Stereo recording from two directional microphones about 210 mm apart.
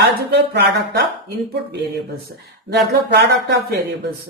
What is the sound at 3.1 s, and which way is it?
Speech, 55° right (ahead or behind).